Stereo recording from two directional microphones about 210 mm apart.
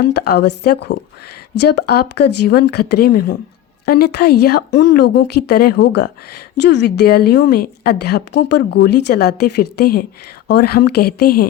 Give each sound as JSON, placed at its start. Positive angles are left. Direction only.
{"t": 0.0, "sound": "a woman's voice", "side_deg": 50}